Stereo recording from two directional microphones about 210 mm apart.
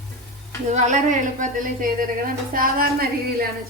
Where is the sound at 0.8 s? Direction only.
35° right (ahead or behind).